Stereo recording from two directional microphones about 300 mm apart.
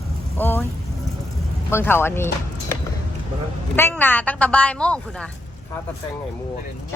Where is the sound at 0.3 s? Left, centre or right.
Centre.